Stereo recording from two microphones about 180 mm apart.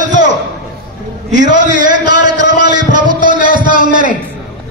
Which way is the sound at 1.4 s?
45° right (ahead or behind).